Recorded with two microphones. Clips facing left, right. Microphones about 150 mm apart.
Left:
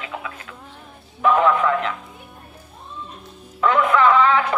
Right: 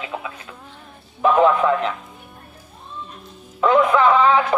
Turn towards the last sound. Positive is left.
turn(degrees=-20)  # may be behind; listen again after turning